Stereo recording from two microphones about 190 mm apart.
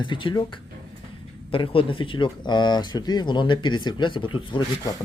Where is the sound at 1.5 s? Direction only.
30° left (ahead or behind).